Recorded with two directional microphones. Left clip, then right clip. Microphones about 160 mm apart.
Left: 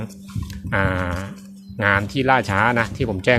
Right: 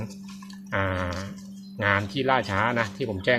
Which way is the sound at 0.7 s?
40° left (ahead or behind).